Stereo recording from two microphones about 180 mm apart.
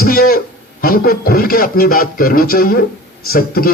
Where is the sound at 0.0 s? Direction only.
55° left (ahead or behind).